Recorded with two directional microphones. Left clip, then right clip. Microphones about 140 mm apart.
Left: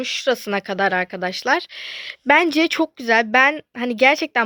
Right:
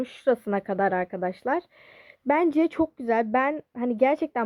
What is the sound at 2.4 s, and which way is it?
Speech, 10° left (ahead or behind).